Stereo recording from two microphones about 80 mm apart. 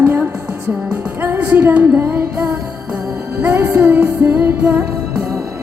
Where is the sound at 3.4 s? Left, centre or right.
Right.